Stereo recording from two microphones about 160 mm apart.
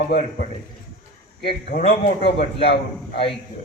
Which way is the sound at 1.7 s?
45° left (ahead or behind).